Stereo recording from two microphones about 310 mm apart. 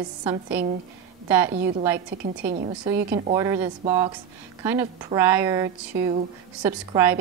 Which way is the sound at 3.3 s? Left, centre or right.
Centre.